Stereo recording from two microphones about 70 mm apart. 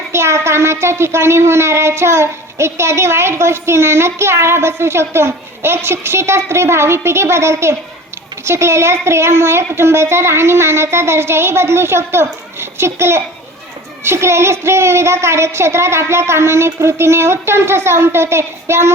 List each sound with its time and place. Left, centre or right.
0.1 s speech: right